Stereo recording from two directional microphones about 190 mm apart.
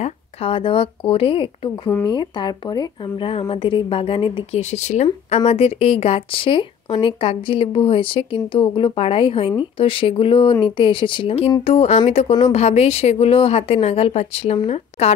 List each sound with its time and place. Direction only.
0.0 s speech: 30° left (ahead or behind)